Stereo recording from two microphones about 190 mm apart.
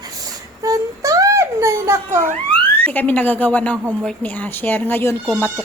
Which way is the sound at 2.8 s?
10° left (ahead or behind).